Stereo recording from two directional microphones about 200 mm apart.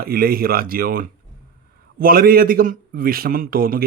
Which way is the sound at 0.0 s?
50° right (ahead or behind).